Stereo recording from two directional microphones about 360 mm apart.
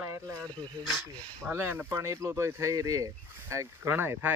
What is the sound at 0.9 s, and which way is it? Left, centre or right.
Speech, centre.